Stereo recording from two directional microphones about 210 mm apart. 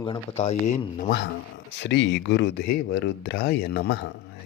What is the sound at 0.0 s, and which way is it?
Speech, 30° left (ahead or behind).